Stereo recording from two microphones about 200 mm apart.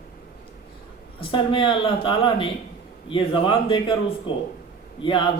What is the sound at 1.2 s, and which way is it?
Speech, 25° left (ahead or behind).